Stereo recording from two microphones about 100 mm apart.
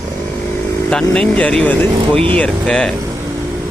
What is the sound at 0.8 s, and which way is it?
Speech, 10° left (ahead or behind).